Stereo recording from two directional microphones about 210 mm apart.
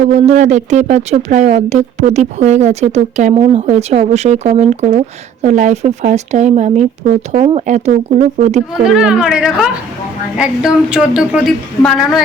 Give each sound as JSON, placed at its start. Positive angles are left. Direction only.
{"t": 0.0, "sound": "speech", "side_deg": -35}
{"t": 9.0, "sound": "speech", "side_deg": -5}